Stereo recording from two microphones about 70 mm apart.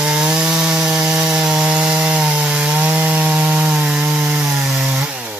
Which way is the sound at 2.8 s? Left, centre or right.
Right.